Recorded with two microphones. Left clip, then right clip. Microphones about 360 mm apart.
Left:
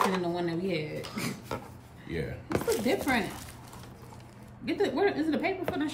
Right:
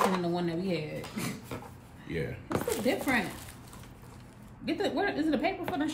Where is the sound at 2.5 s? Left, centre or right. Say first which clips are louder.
Left 2 dB; centre.